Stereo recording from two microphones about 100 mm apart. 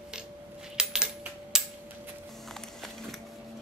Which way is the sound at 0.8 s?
5° right (ahead or behind).